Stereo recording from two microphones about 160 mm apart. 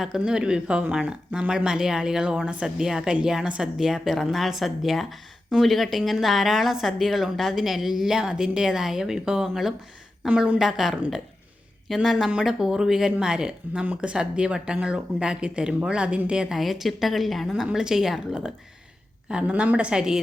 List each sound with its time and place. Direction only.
0.0 s a woman's voice: 5° right (ahead or behind)